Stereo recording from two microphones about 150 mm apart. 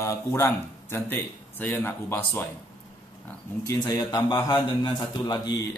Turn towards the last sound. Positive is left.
turn(degrees=25)  # may be behind; listen again after turning